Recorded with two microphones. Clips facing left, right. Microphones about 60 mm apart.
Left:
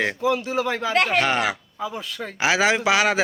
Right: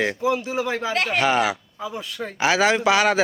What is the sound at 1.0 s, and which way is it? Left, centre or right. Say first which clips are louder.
A man's voice: right 4 dB; centre.